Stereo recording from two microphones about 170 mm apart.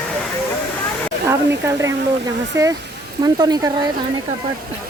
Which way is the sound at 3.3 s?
25° right (ahead or behind).